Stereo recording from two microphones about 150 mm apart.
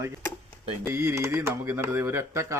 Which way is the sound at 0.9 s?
15° right (ahead or behind).